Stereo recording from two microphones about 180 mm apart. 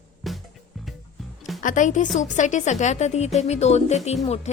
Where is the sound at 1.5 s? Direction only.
45° left (ahead or behind).